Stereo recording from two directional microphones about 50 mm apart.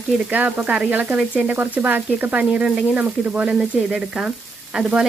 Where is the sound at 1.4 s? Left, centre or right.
Right.